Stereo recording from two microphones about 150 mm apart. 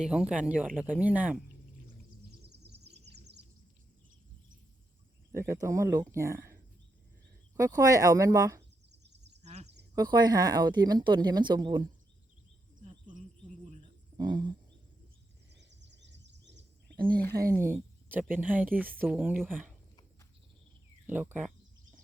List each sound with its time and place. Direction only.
0.0 s speech: 5° right (ahead or behind)
2.4 s bird: 90° right
5.3 s a woman's voice: 20° right (ahead or behind)
7.5 s a woman's voice: 25° right (ahead or behind)
8.9 s a sound: 90° right
9.4 s a sound: 45° right (ahead or behind)
9.9 s a woman's voice: 25° right (ahead or behind)
13.1 s insect: 55° right (ahead or behind)
14.2 s a woman's voice: 30° right (ahead or behind)
17.5 s speech: 15° right (ahead or behind)
21.1 s speech: 10° right (ahead or behind)